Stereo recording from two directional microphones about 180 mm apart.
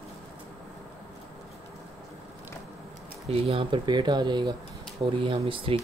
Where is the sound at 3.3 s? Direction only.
30° right (ahead or behind).